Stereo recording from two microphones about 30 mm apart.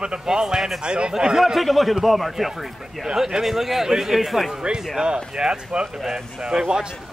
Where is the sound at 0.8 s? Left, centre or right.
Right.